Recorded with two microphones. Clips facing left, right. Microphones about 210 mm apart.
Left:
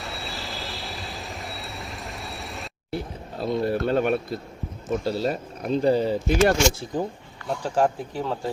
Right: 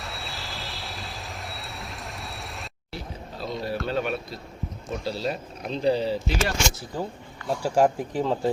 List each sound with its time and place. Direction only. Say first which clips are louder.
0.0 s vehicle: left 3 dB; centre (ahead or behind)
2.9 s a sound: left 6 dB; 50° left (ahead or behind)
4.9 s speech: left 5 dB; 50° left (ahead or behind)
6.9 s speech: left 4 dB; 20° left (ahead or behind)
7.4 s speech: right 2 dB; 10° right (ahead or behind)